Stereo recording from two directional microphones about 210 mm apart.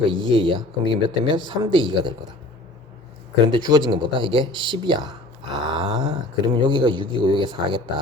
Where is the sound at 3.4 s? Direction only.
20° right (ahead or behind).